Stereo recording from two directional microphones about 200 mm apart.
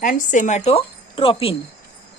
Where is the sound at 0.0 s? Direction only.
40° left (ahead or behind).